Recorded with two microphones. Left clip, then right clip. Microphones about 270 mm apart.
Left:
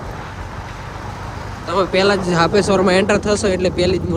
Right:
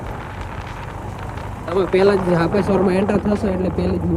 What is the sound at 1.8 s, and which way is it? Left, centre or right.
Speech, centre.